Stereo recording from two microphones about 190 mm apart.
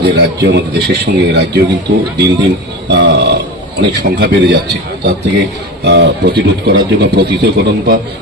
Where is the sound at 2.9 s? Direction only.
60° right (ahead or behind).